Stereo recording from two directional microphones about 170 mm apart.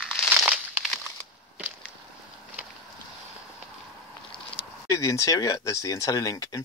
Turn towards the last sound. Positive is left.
turn(degrees=20)  # may be behind; listen again after turning